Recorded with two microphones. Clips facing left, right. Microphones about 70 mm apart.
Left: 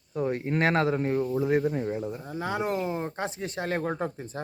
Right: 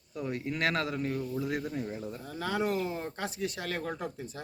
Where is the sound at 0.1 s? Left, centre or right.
Left.